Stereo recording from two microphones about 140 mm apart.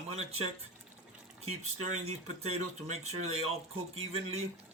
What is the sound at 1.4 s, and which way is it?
Speech, 55° right (ahead or behind).